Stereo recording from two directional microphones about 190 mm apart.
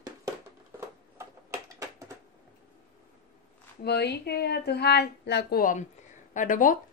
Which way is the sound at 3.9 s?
60° left (ahead or behind).